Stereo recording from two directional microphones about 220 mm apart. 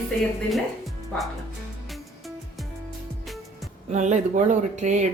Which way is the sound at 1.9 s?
Centre (ahead or behind).